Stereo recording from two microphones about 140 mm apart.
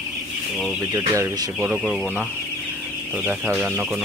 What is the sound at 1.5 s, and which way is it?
Speech, 5° right (ahead or behind).